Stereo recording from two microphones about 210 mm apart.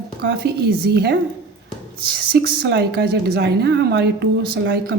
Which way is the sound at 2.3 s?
55° right (ahead or behind).